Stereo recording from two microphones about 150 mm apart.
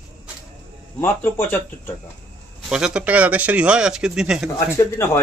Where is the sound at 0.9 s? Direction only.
15° left (ahead or behind).